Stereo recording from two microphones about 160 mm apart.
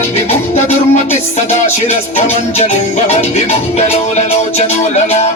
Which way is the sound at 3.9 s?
40° left (ahead or behind).